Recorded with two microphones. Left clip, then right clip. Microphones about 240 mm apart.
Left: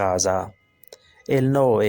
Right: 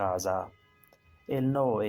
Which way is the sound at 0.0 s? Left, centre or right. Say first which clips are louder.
Left 8 dB; left.